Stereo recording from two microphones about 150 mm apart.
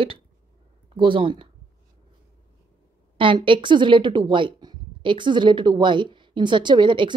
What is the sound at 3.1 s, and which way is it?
Speech, 35° right (ahead or behind).